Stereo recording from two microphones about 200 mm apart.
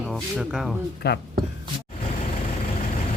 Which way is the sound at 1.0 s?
55° left (ahead or behind).